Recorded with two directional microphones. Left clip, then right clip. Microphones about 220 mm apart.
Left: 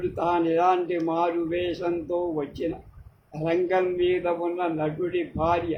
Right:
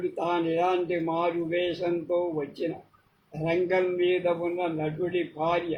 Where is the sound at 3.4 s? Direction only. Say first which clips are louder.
Left 2 dB; 15° left (ahead or behind).